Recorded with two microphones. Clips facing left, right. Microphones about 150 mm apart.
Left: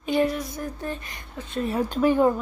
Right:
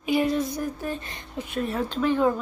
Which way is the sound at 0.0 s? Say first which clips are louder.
Left 1 dB; 10° right (ahead or behind).